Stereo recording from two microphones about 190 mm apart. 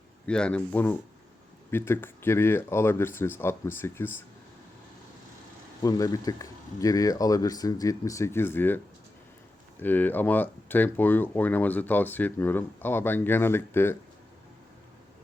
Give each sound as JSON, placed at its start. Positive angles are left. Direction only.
{"t": 0.3, "sound": "speech", "side_deg": 5}
{"t": 5.8, "sound": "speech", "side_deg": 20}
{"t": 9.8, "sound": "speech", "side_deg": 10}